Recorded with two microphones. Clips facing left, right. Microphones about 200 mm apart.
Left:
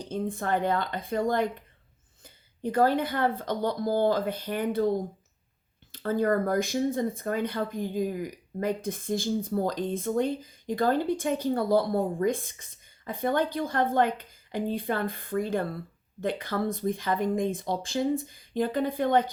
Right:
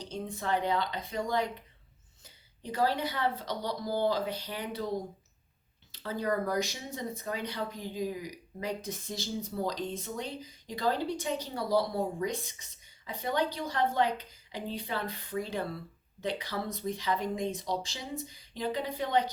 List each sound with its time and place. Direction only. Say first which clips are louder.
0.0 s speech: left 6 dB; 50° left (ahead or behind)